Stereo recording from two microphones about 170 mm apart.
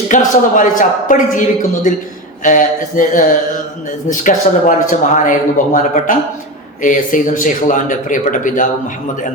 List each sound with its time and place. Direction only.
0.1 s speech: 50° left (ahead or behind)